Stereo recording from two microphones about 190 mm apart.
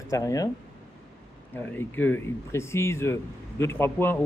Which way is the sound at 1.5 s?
10° left (ahead or behind).